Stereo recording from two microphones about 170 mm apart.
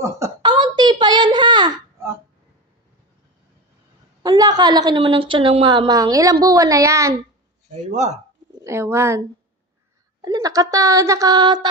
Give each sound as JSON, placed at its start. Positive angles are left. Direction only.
{"t": 0.0, "sound": "a sound", "side_deg": -20}
{"t": 4.2, "sound": "a woman's voice", "side_deg": -25}
{"t": 7.9, "sound": "speech", "side_deg": -45}
{"t": 8.6, "sound": "speech", "side_deg": -15}
{"t": 10.2, "sound": "a woman's voice", "side_deg": -20}